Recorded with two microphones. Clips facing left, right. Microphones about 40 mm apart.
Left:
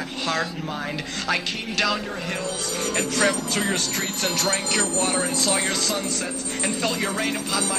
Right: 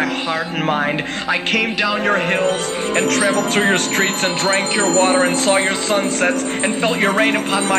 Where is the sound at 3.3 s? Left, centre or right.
Right.